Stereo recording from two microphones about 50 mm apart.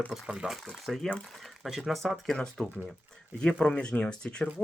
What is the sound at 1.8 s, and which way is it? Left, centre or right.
Speech, centre.